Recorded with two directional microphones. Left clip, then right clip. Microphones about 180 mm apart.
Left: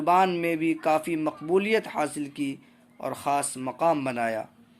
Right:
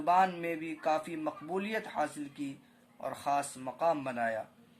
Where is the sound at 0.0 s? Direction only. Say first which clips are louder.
Left 6 dB; 30° left (ahead or behind).